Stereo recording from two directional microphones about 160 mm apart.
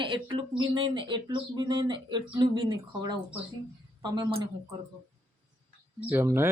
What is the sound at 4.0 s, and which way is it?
Speech, 25° right (ahead or behind).